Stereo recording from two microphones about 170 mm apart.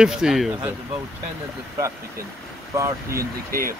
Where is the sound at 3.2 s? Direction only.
60° right (ahead or behind).